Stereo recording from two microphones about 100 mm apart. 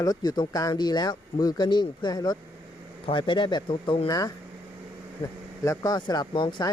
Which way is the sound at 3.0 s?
55° left (ahead or behind).